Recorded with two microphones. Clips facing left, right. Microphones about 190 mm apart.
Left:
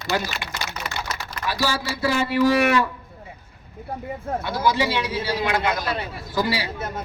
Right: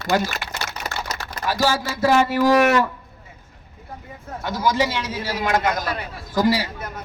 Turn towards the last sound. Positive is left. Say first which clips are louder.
# right 5 dB
turn(degrees=-45)  # may be behind; listen again after turning